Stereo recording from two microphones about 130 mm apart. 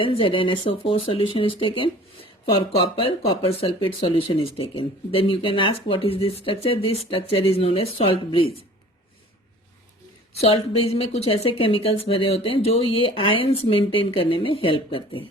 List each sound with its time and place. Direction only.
0.0 s speech: 40° left (ahead or behind)
10.4 s speech: 45° left (ahead or behind)